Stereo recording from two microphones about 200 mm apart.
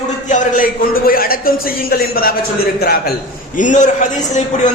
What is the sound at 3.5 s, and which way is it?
Speech, 40° left (ahead or behind).